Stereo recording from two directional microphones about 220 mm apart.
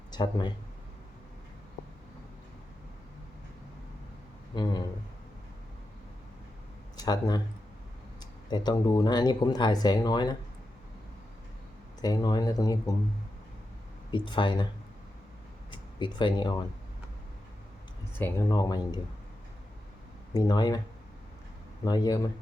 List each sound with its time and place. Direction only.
0.1 s speech: 20° left (ahead or behind)
4.5 s speech: 20° left (ahead or behind)
6.9 s speech: 20° left (ahead or behind)
12.0 s speech: 15° left (ahead or behind)
14.1 s speech: 20° left (ahead or behind)
15.7 s speech: 20° left (ahead or behind)
18.2 s speech: 15° left (ahead or behind)
20.3 s speech: 20° left (ahead or behind)
21.8 s speech: 20° left (ahead or behind)